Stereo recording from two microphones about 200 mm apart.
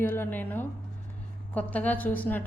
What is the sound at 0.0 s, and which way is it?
A woman's voice, 10° left (ahead or behind).